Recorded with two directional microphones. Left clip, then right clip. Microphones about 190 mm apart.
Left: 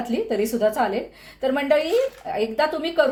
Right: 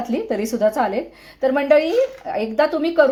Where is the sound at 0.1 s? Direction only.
20° right (ahead or behind).